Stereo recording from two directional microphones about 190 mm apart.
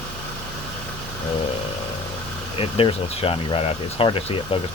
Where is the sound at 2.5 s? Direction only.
30° left (ahead or behind).